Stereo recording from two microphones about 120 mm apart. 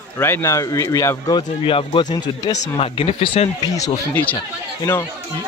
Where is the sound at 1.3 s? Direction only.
45° left (ahead or behind).